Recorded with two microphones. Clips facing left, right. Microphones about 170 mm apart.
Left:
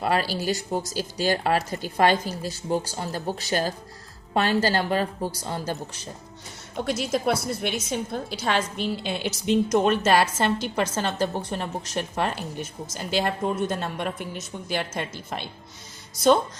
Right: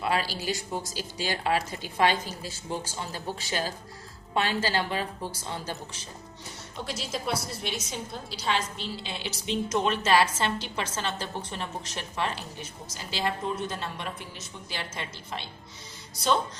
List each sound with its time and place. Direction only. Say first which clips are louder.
0.0 s a woman's voice: left 4 dB; 45° left (ahead or behind)
6.8 s a woman's voice: left 9 dB; 55° left (ahead or behind)